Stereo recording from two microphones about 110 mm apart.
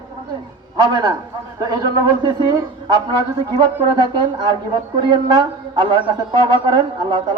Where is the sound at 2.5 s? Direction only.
35° right (ahead or behind).